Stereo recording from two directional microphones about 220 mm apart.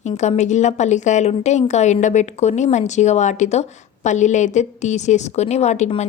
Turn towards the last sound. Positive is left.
turn(degrees=30)  # may be behind; listen again after turning